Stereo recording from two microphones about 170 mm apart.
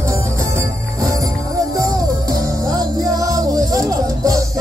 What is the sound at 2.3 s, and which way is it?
Music, 20° right (ahead or behind).